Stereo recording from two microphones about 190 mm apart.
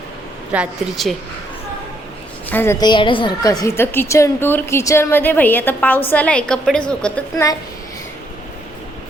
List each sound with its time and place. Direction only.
0.5 s a woman's voice: 5° right (ahead or behind)
2.5 s a woman's voice: 10° left (ahead or behind)